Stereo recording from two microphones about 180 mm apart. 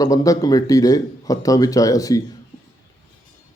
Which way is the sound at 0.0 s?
20° left (ahead or behind).